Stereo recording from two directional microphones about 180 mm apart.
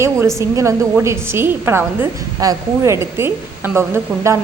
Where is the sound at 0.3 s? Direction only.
15° right (ahead or behind).